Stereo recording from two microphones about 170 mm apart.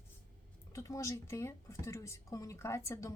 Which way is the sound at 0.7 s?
20° left (ahead or behind).